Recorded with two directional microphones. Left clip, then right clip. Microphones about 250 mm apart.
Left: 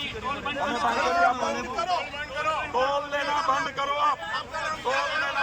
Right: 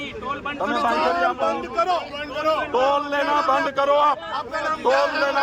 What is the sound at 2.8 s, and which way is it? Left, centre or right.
Speech, centre.